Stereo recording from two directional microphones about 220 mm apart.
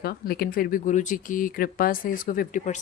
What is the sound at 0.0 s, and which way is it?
Speech, 45° left (ahead or behind).